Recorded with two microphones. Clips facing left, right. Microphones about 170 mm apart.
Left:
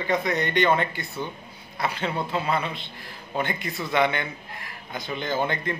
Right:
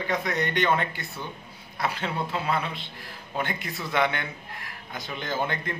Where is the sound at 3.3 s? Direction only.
Centre (ahead or behind).